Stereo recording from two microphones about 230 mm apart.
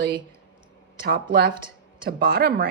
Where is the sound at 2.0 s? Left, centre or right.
Right.